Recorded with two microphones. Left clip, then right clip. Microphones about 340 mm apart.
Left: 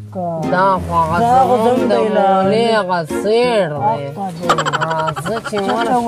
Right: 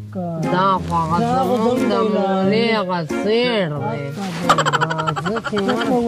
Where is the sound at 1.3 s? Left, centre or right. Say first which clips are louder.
Left 6 dB; left.